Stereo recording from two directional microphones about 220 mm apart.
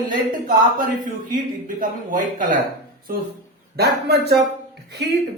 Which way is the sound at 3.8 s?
45° right (ahead or behind).